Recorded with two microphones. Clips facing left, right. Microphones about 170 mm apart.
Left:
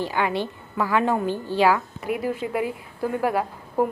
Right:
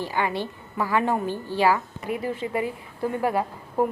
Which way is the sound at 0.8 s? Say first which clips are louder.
Left 2 dB; 5° right (ahead or behind).